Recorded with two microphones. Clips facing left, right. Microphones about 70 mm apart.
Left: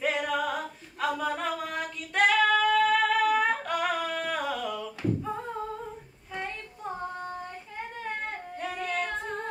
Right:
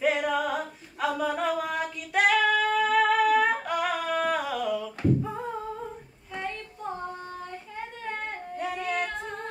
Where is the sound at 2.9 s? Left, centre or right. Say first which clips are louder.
Right 2 dB; centre.